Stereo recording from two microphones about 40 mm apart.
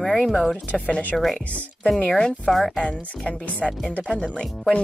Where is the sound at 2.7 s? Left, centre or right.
Left.